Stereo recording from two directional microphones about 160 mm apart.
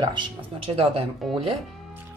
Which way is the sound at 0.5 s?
40° right (ahead or behind).